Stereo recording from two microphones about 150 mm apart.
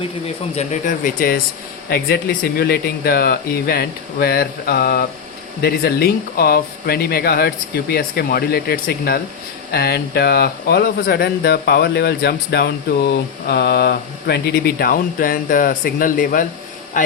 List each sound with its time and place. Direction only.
0.5 s speech: 50° left (ahead or behind); by 1.4 s 70° left (ahead or behind)
1.9 s speech: 80° left; by 16.5 s 65° left (ahead or behind)